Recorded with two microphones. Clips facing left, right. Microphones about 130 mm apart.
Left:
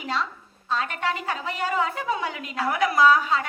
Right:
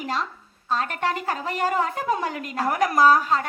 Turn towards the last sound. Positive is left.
turn(degrees=-45)  # may be behind; listen again after turning